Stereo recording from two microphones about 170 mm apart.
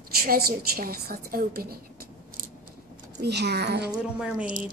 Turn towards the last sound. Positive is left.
turn(degrees=-55)  # may be behind; listen again after turning